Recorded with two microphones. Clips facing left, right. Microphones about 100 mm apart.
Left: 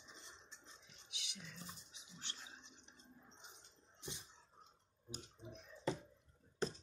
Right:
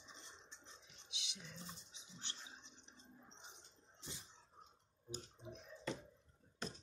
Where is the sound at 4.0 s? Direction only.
20° left (ahead or behind).